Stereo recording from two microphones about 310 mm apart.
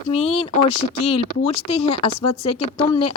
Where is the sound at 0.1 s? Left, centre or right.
Centre.